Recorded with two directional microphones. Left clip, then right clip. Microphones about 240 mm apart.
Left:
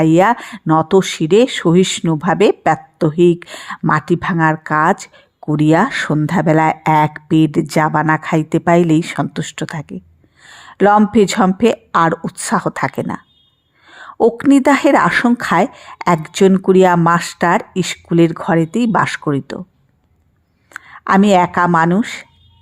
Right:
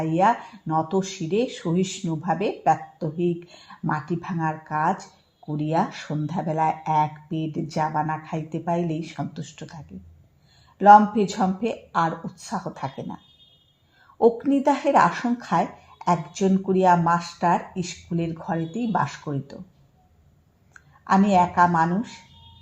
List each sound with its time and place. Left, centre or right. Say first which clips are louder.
0.0 s speech: left 9 dB; left
20.7 s speech: left 8 dB; left